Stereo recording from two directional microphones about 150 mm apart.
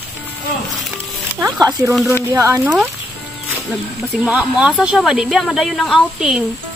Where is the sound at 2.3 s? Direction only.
20° right (ahead or behind).